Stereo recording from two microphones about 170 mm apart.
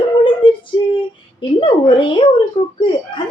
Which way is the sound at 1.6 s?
30° left (ahead or behind).